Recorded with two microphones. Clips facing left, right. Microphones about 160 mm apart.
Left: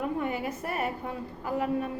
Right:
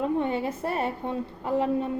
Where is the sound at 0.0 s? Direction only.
25° right (ahead or behind).